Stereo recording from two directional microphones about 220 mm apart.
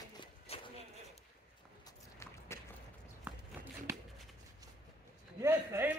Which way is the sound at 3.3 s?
5° right (ahead or behind).